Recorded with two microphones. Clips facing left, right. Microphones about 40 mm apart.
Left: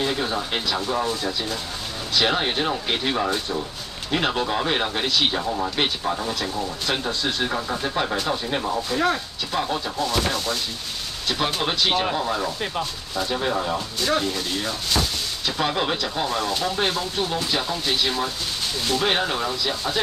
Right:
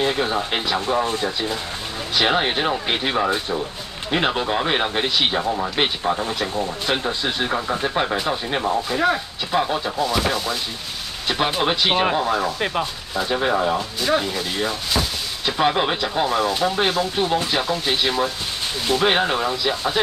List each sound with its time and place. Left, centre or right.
0.0 s speech: centre
13.1 s speech: centre